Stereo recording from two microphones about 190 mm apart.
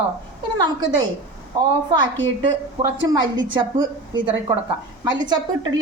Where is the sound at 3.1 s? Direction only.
20° right (ahead or behind).